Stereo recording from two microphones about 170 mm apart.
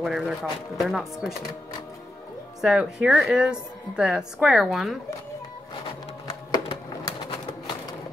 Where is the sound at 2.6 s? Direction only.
5° right (ahead or behind).